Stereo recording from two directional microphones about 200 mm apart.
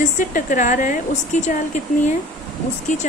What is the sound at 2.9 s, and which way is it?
Speech, 40° left (ahead or behind).